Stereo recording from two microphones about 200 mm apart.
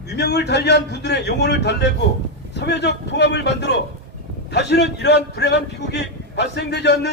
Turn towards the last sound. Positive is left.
turn(degrees=60)  # may be behind; listen again after turning